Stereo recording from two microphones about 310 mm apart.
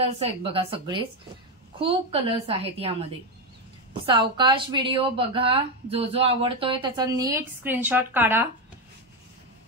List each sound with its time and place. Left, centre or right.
0.0 s a woman's voice: centre